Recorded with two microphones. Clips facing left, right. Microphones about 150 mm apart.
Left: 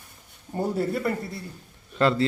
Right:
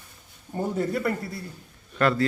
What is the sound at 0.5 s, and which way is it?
Speech, 10° left (ahead or behind).